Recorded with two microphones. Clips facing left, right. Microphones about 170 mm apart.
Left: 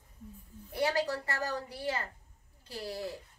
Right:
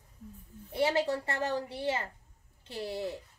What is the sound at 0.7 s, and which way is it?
A woman's voice, 25° right (ahead or behind).